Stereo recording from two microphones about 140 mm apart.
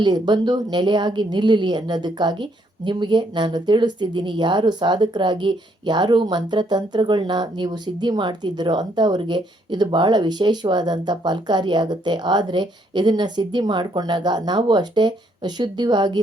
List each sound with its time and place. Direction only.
0.0 s a woman's voice: 30° right (ahead or behind)